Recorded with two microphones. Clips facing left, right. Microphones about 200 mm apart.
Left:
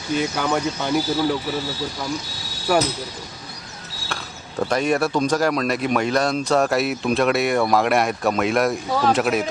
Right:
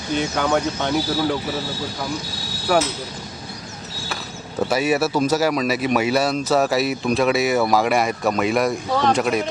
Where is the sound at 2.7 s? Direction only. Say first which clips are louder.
Even; 5° left (ahead or behind).